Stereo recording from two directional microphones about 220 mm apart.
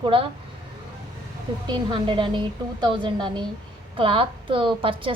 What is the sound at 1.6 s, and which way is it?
A woman's voice, 20° right (ahead or behind).